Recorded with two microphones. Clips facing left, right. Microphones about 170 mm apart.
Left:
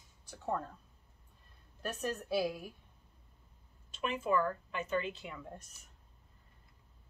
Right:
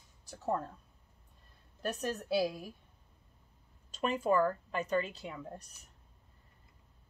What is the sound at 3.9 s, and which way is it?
Speech, 40° right (ahead or behind).